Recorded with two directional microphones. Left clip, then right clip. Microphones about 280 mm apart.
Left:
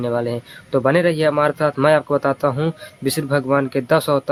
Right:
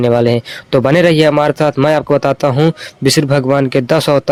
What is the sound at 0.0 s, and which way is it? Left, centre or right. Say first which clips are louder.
Speech: right 10 dB; right.